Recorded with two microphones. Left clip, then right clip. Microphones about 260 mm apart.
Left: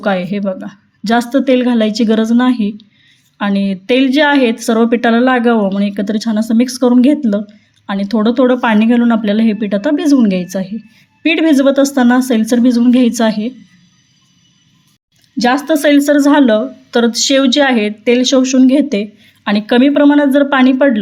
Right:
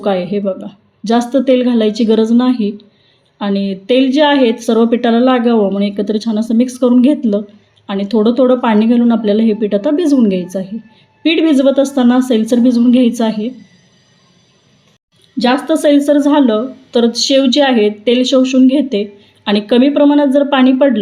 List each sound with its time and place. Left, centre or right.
0.0 s a woman's voice: left
11.7 s speech: left
11.9 s a woman's voice: left
15.5 s speech: left
15.8 s speech: left